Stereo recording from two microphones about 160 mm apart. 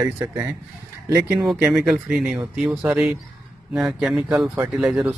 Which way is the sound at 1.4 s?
Centre (ahead or behind).